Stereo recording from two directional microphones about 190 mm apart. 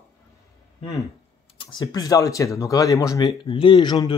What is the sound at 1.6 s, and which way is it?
Speech, 20° left (ahead or behind).